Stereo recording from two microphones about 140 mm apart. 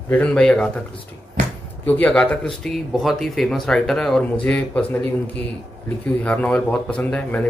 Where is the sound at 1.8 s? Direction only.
10° left (ahead or behind).